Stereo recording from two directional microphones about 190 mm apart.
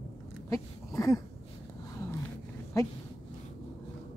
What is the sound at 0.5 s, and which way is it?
Speech, 20° left (ahead or behind).